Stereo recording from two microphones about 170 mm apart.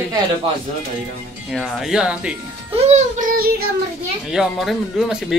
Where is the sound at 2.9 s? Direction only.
45° right (ahead or behind).